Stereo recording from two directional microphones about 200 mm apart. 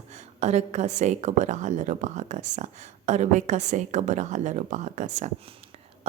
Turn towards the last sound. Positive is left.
turn(degrees=-35)  # may be behind; listen again after turning